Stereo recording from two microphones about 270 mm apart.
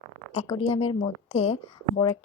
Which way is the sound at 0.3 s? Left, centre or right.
Left.